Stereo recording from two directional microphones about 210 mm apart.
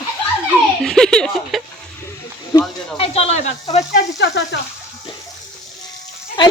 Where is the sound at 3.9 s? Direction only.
55° left (ahead or behind).